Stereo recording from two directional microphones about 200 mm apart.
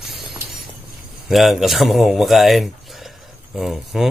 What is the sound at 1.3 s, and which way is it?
Speech, centre (ahead or behind).